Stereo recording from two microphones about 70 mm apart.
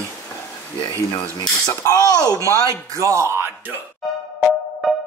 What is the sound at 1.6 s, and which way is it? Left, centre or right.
Speech, left.